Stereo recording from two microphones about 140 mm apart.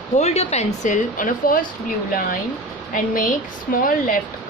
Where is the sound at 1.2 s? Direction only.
80° left.